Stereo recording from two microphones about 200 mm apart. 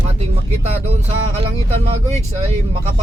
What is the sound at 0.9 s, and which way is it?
A man's voice, 35° right (ahead or behind).